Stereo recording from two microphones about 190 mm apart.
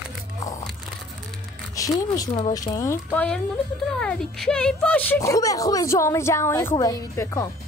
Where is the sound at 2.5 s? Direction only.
20° left (ahead or behind).